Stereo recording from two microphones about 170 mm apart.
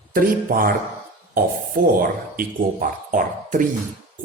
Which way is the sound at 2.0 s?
55° right (ahead or behind).